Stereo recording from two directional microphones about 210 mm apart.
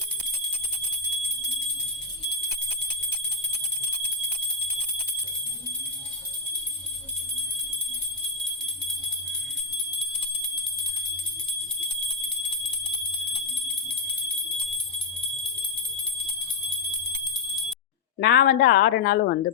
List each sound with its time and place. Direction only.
18.2 s a woman's voice: 50° left (ahead or behind)